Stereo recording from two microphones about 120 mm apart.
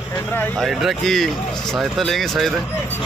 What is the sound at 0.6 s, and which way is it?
Speech, centre (ahead or behind).